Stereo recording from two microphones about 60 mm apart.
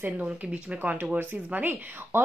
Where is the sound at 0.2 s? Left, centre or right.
Centre.